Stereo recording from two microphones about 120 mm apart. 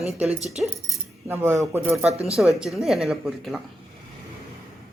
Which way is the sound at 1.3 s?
20° right (ahead or behind).